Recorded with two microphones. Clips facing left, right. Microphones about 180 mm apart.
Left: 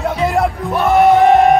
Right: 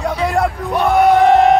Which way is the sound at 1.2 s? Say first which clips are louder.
Left 1 dB; 15° left (ahead or behind).